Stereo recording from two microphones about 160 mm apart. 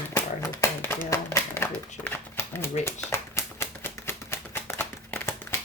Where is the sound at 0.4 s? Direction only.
15° left (ahead or behind).